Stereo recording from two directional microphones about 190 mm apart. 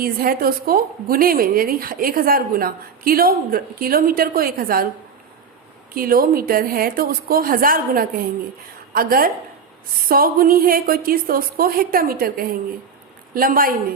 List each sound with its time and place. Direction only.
0.0 s a woman's voice: 50° right (ahead or behind)
5.9 s a woman's voice: 50° right (ahead or behind)